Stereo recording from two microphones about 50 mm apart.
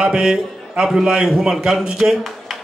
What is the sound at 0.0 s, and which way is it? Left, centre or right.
Speech, centre.